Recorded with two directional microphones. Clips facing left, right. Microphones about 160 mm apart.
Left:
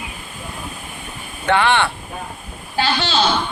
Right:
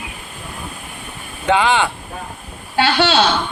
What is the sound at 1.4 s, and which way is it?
Speech, 15° right (ahead or behind).